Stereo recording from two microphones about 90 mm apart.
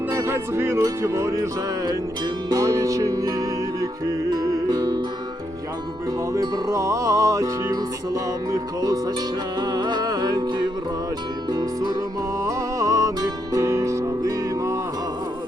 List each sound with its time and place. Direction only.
0.1 s music: 30° right (ahead or behind)
2.5 s music: 45° right (ahead or behind)
6.3 s music: 35° right (ahead or behind)